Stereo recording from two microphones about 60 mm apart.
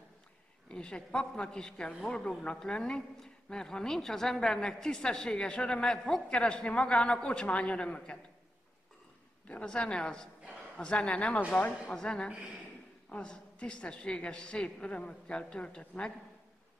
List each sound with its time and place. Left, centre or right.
0.7 s a woman's voice: centre
9.7 s a woman's voice: centre